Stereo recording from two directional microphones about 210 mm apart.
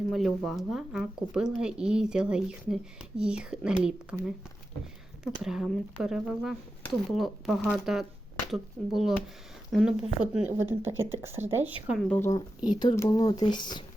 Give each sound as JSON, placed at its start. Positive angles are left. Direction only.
{"t": 0.1, "sound": "speech", "side_deg": 0}
{"t": 11.9, "sound": "speech", "side_deg": 0}
{"t": 12.6, "sound": "speech", "side_deg": 20}